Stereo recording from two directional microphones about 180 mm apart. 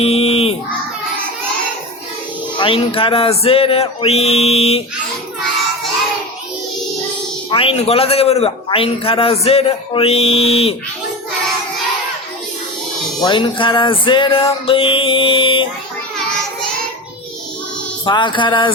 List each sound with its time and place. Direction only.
0.0 s a sound: 35° left (ahead or behind)
2.6 s a man's voice: 30° left (ahead or behind)
7.5 s a man's voice: 30° left (ahead or behind)
13.2 s music: 25° left (ahead or behind)
18.0 s music: 25° left (ahead or behind)